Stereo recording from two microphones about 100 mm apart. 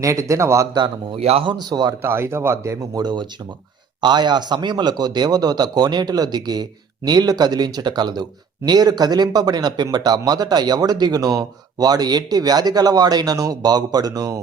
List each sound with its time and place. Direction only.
0.0 s speech: 30° right (ahead or behind)
1.1 s speech: 85° right
1.5 s speech: 45° right (ahead or behind)
2.0 s speech: 25° right (ahead or behind)
2.9 s speech: 45° right (ahead or behind)